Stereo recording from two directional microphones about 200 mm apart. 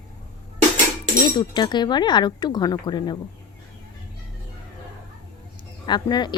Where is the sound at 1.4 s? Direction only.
20° left (ahead or behind).